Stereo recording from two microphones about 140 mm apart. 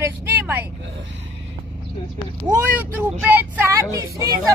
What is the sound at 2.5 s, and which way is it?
Speech, 15° right (ahead or behind).